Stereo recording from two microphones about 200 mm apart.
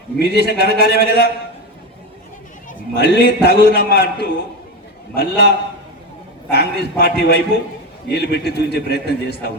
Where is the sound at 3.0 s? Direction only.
55° left (ahead or behind).